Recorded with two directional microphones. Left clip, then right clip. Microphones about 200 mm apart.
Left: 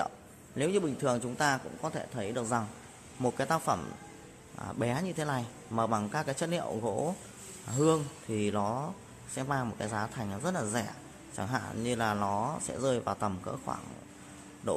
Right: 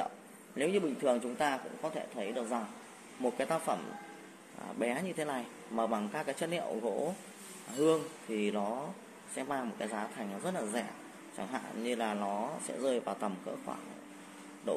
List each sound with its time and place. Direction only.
0.6 s a man's voice: 15° left (ahead or behind)
1.8 s speech: 30° left (ahead or behind)